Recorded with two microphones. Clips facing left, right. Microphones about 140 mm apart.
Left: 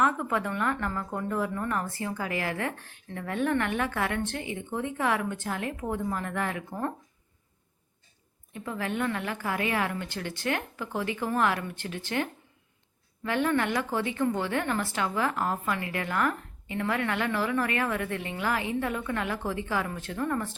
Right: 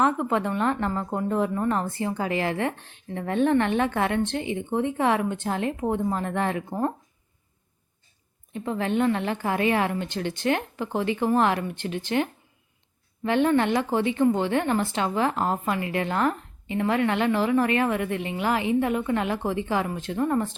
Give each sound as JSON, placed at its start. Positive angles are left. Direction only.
{"t": 0.0, "sound": "a woman's voice", "side_deg": -25}
{"t": 8.5, "sound": "a woman's voice", "side_deg": -25}